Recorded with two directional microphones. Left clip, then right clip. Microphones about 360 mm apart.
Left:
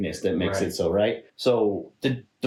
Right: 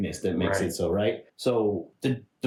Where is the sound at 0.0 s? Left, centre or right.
Centre.